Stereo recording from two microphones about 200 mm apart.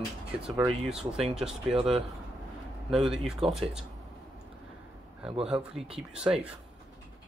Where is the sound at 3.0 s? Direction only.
Centre (ahead or behind).